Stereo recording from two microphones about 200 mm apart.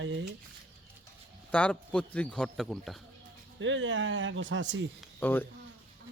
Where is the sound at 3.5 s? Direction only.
70° right (ahead or behind).